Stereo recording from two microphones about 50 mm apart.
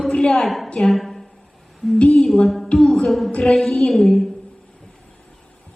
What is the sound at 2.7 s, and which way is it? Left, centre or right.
Humming, centre.